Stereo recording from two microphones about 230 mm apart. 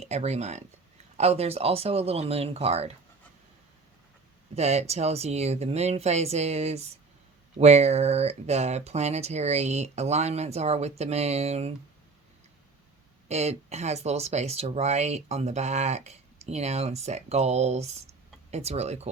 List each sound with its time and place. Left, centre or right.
0.0 s speech: right
4.5 s speech: right
13.2 s speech: right